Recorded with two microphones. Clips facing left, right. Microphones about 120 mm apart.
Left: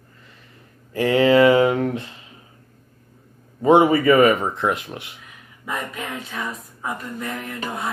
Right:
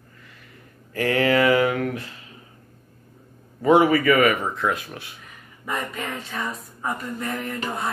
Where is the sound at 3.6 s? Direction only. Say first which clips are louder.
Left 2 dB; 25° left (ahead or behind).